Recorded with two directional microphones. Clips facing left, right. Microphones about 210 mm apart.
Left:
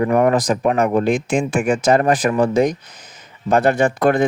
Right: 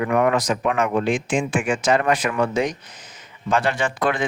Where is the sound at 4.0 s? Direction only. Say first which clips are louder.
Left 6 dB; 40° left (ahead or behind).